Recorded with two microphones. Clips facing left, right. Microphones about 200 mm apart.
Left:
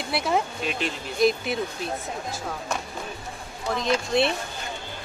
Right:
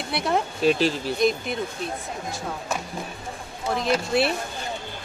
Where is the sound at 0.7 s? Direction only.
35° right (ahead or behind).